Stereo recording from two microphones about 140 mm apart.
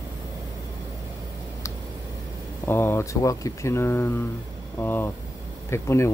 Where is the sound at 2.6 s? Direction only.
15° left (ahead or behind).